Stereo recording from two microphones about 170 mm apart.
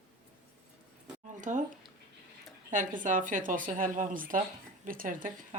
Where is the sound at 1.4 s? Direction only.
50° right (ahead or behind).